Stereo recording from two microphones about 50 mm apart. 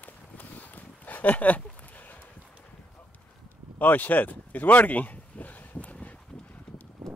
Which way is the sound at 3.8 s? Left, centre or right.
Left.